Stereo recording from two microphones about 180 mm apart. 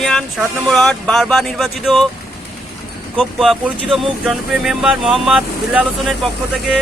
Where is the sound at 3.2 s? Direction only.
Centre (ahead or behind).